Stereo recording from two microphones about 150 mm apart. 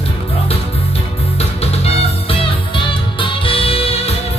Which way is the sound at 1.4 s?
45° left (ahead or behind).